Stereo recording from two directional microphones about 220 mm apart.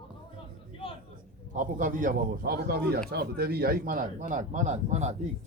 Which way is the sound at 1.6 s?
35° right (ahead or behind).